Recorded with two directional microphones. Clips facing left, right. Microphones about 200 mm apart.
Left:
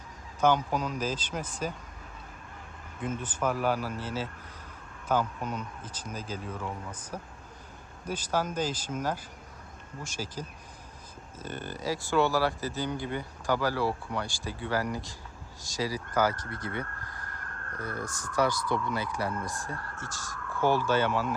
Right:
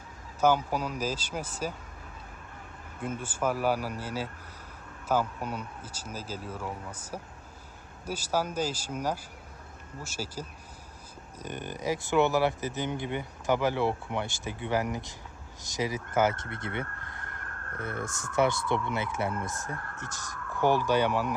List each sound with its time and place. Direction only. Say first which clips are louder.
0.3 s speech: even; 5° right (ahead or behind)
3.0 s speech: even; 10° right (ahead or behind)